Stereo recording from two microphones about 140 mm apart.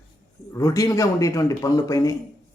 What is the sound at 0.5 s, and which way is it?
Speech, 25° left (ahead or behind).